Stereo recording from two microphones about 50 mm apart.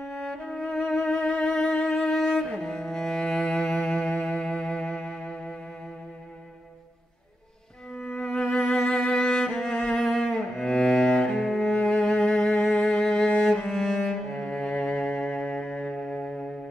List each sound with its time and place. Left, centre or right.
0.1 s music: left
1.0 s music: left
7.9 s music: centre
9.9 s cello: centre
11.6 s music: centre